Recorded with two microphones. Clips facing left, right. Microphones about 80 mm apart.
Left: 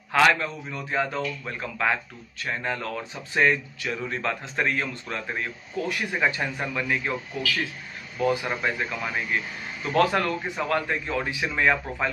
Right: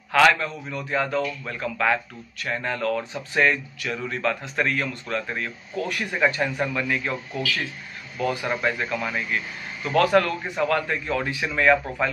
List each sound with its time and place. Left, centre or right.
0.1 s speech: left